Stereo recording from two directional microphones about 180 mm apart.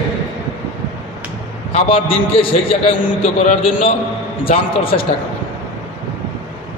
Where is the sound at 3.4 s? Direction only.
40° left (ahead or behind).